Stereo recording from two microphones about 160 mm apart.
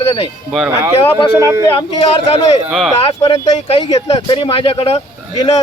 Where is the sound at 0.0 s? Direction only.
35° left (ahead or behind).